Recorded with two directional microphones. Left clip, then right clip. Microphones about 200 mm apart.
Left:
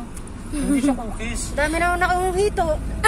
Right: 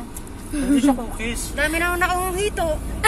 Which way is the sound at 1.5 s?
30° left (ahead or behind).